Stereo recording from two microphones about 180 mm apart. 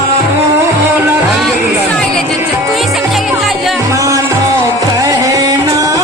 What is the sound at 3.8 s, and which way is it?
Music, 15° right (ahead or behind).